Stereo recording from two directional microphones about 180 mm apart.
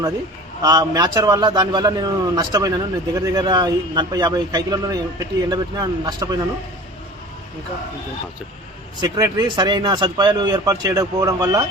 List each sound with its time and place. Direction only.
0.6 s a man's voice: 20° right (ahead or behind)
9.0 s a man's voice: 20° right (ahead or behind)